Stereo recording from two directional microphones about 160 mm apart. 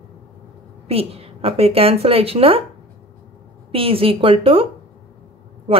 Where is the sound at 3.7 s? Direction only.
35° right (ahead or behind).